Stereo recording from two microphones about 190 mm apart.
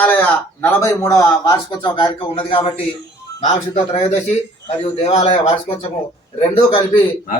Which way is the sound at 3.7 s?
30° left (ahead or behind).